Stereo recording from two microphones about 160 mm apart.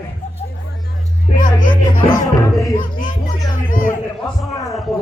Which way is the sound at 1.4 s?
55° left (ahead or behind).